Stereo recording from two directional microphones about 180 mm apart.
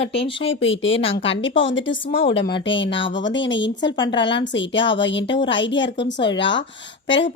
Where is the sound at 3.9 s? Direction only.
25° left (ahead or behind).